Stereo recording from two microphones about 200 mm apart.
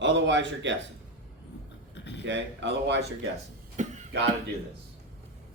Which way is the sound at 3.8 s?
35° right (ahead or behind).